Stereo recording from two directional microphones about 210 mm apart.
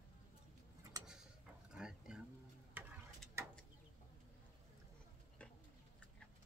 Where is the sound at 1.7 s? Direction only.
5° right (ahead or behind).